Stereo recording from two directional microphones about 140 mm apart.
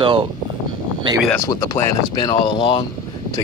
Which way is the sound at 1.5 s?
25° left (ahead or behind).